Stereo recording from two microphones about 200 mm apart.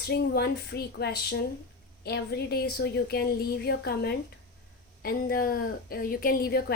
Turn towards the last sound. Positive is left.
turn(degrees=50)  # may be behind; listen again after turning